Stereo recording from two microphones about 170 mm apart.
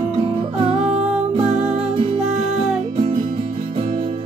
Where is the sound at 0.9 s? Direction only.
45° right (ahead or behind).